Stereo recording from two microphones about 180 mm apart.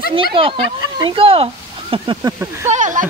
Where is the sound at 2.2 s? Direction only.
15° right (ahead or behind).